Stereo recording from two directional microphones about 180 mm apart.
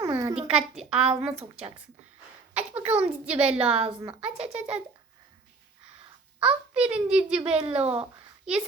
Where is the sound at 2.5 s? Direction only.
10° right (ahead or behind).